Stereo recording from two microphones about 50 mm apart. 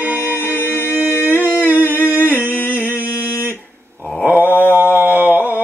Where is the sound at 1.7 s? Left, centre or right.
Right.